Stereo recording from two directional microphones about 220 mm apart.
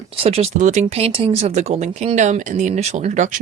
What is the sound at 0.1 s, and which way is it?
Speech, 25° right (ahead or behind).